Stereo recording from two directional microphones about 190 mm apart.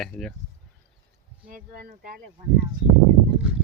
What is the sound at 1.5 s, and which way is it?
Speech, 45° right (ahead or behind).